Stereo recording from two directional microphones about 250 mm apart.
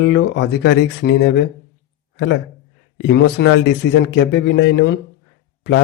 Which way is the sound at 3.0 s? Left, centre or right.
Left.